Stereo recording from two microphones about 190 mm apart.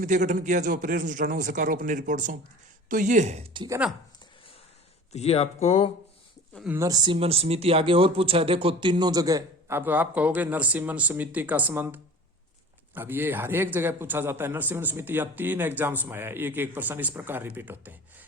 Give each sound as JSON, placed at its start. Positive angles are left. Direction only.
{"t": 0.0, "sound": "speech", "side_deg": -40}
{"t": 5.1, "sound": "speech", "side_deg": 35}
{"t": 6.7, "sound": "speech", "side_deg": -15}